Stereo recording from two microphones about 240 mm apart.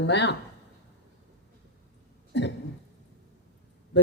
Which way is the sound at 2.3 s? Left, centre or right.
Left.